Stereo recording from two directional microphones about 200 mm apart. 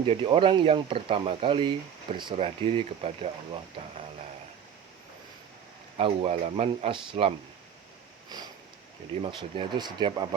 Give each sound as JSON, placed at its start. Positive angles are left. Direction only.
{"t": 0.0, "sound": "speech", "side_deg": -25}
{"t": 6.0, "sound": "speech", "side_deg": -30}
{"t": 9.2, "sound": "speech", "side_deg": -25}